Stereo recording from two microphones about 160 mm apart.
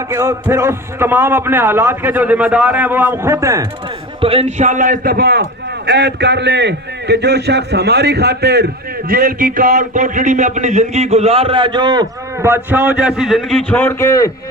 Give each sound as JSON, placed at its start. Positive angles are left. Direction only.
{"t": 0.1, "sound": "a man's voice", "side_deg": -15}
{"t": 4.2, "sound": "a man's voice", "side_deg": -40}
{"t": 9.0, "sound": "a man's voice", "side_deg": -65}
{"t": 12.4, "sound": "a man's voice", "side_deg": -15}